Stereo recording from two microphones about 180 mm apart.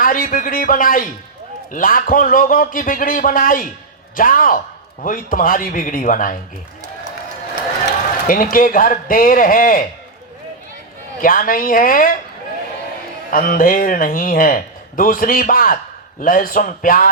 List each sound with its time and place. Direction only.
0.0 s speech: 50° left (ahead or behind)
8.3 s speech: 50° left (ahead or behind)
11.2 s speech: 50° left (ahead or behind)
13.3 s speech: 50° left (ahead or behind)